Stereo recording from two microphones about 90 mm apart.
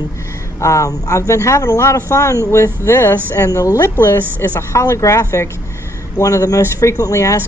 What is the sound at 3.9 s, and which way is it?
Speech, 25° left (ahead or behind).